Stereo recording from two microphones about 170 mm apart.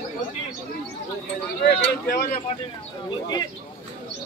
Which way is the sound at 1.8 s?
60° left (ahead or behind).